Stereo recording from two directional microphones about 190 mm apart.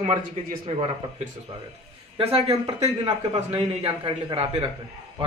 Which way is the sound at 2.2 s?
30° right (ahead or behind).